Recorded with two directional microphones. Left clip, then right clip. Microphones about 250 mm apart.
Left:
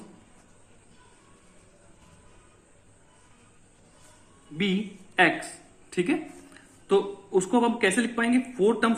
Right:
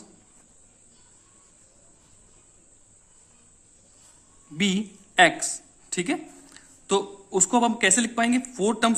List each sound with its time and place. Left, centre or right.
4.5 s a man's voice: right